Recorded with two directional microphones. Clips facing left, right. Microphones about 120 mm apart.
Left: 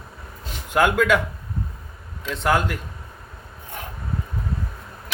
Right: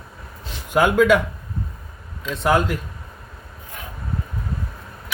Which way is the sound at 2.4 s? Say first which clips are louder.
Right 2 dB; 10° right (ahead or behind).